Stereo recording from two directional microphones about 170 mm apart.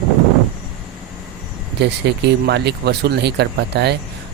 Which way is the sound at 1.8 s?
80° right.